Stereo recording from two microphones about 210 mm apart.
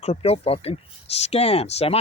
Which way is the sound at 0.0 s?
30° left (ahead or behind).